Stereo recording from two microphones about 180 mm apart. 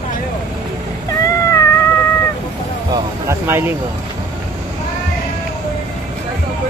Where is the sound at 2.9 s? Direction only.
15° right (ahead or behind).